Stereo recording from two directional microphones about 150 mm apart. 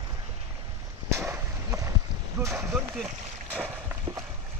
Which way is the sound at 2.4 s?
15° right (ahead or behind).